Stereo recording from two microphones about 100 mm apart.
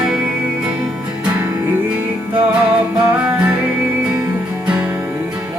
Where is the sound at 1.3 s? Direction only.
20° right (ahead or behind).